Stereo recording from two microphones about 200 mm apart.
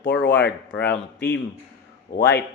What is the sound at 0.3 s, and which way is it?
Speech, 60° left (ahead or behind).